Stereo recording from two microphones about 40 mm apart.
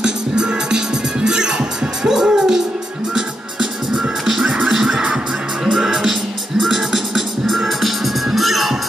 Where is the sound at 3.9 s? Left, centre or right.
Centre.